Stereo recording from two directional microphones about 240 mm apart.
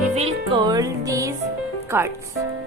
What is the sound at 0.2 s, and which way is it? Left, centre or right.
Music, right.